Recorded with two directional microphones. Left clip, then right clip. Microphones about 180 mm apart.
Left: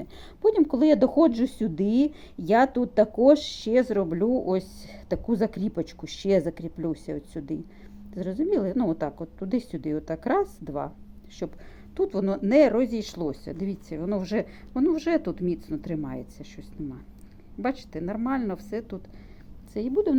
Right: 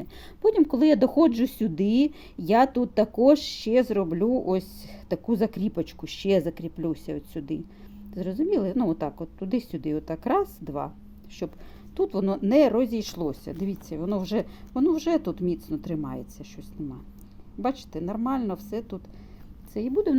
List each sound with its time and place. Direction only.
0.0 s speech: 25° right (ahead or behind)
17.6 s speech: 20° right (ahead or behind)